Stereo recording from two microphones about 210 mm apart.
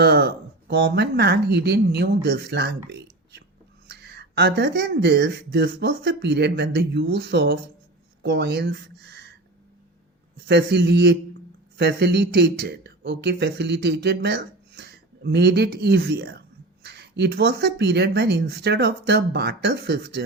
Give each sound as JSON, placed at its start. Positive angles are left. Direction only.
{"t": 0.0, "sound": "speech", "side_deg": -50}
{"t": 10.4, "sound": "speech", "side_deg": -55}